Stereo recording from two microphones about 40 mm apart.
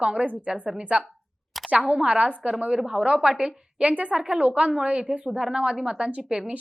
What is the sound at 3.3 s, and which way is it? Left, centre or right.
A woman's voice, right.